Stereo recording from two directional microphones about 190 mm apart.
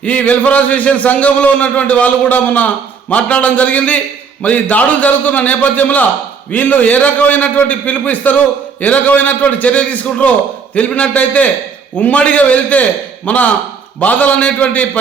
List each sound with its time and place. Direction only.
0.0 s a man's voice: 5° left (ahead or behind)